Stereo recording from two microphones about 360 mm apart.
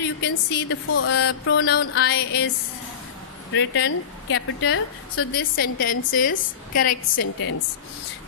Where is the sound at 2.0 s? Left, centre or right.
Left.